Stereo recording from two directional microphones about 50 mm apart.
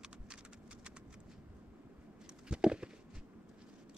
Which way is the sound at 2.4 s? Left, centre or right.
Centre.